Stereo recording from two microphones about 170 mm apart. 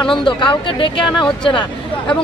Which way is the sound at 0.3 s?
30° left (ahead or behind).